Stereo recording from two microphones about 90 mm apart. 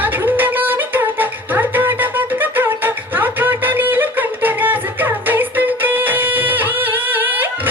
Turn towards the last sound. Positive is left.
turn(degrees=-20)  # may be behind; listen again after turning